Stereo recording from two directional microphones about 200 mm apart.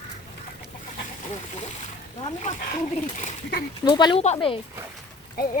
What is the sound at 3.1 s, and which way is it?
Speech, 40° left (ahead or behind).